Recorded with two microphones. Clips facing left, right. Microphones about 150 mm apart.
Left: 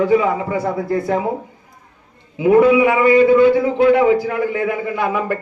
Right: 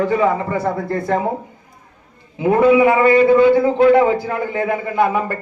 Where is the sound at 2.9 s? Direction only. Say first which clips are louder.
Even; 35° right (ahead or behind).